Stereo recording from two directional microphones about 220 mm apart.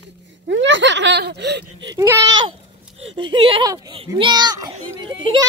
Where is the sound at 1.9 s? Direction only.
15° right (ahead or behind).